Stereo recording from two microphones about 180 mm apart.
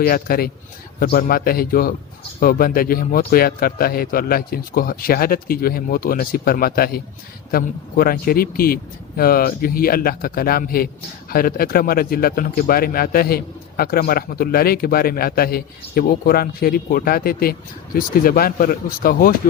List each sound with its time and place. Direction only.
0.0 s speech: 55° left (ahead or behind)